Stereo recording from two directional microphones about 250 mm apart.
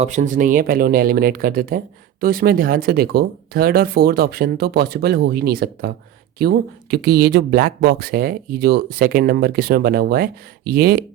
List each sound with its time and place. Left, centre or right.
0.0 s speech: right